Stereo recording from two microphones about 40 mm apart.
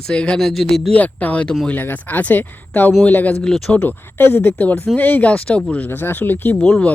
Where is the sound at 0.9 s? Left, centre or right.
Left.